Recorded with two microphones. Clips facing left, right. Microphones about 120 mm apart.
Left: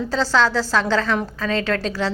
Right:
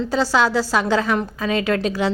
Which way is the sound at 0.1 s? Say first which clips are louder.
Even; 10° right (ahead or behind).